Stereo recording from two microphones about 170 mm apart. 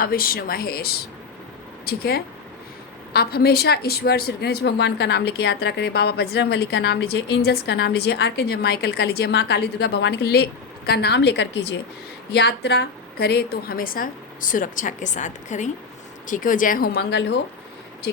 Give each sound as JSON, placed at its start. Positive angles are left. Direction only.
{"t": 0.0, "sound": "a woman's voice", "side_deg": 60}
{"t": 12.3, "sound": "a woman's voice", "side_deg": 80}